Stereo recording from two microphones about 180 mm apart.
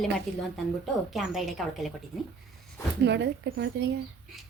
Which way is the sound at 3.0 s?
75° right (ahead or behind).